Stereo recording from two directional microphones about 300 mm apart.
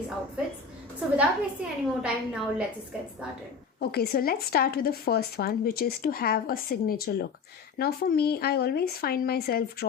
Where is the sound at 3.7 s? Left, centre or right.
Left.